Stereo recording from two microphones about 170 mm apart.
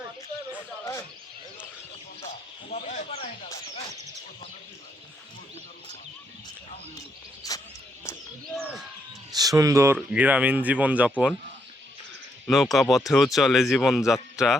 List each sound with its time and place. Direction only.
2.6 s speech: 45° left (ahead or behind)
7.4 s a sound: 20° left (ahead or behind)
9.3 s speech: 20° right (ahead or behind)
12.5 s speech: centre (ahead or behind)